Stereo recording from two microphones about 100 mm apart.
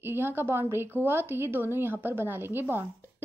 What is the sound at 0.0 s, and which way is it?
A woman's voice, 25° right (ahead or behind).